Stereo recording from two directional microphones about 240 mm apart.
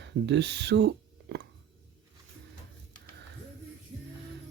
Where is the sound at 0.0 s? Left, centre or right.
Right.